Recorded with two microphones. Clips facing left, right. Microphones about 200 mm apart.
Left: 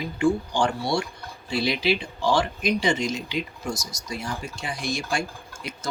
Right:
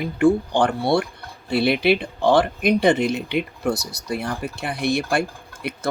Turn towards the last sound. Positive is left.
turn(degrees=-60)  # may be behind; listen again after turning